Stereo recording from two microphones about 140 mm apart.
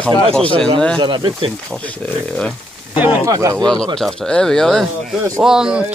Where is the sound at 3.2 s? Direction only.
25° right (ahead or behind).